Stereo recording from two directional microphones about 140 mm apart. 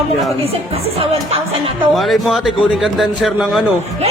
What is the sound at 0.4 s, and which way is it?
Speech, 45° right (ahead or behind).